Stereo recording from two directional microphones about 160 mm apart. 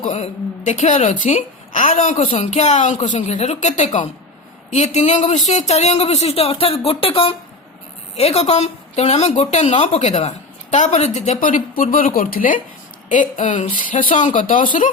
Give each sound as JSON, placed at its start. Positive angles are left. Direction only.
{"t": 0.0, "sound": "a woman's voice", "side_deg": 50}